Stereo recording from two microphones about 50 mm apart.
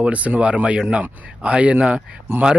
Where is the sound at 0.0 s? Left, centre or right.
Right.